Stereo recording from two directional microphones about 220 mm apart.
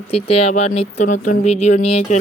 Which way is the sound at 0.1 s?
25° left (ahead or behind).